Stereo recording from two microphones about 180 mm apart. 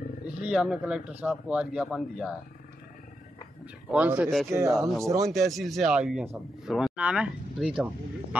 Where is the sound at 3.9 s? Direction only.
10° right (ahead or behind).